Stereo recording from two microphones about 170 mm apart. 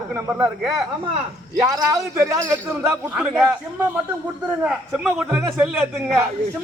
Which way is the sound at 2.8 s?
15° right (ahead or behind).